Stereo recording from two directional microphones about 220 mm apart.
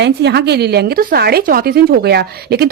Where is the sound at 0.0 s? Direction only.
50° right (ahead or behind).